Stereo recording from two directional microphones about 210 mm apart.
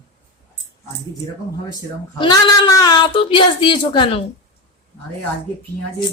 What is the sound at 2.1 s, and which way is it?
Speech, 20° left (ahead or behind).